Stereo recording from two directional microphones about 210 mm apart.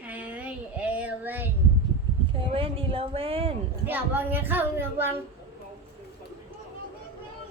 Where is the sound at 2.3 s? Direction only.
25° right (ahead or behind).